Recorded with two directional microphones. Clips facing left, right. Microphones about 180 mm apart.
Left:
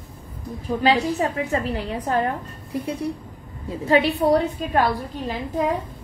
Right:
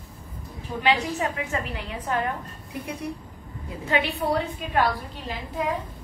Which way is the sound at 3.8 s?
35° left (ahead or behind).